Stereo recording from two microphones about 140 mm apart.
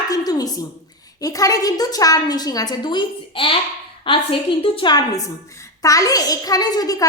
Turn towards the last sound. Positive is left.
turn(degrees=25)  # may be behind; listen again after turning